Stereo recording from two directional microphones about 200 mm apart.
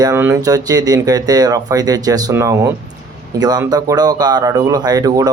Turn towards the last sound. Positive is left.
turn(degrees=-20)  # may be behind; listen again after turning